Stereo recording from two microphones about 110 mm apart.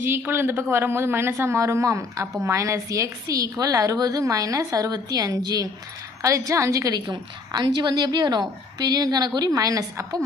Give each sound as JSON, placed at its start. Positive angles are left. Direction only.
{"t": 0.0, "sound": "a woman's voice", "side_deg": -20}